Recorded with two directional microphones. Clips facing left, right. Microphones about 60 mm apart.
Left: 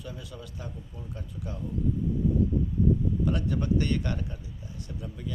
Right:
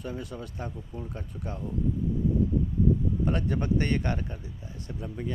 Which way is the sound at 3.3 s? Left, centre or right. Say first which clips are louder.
Right 1 dB; right.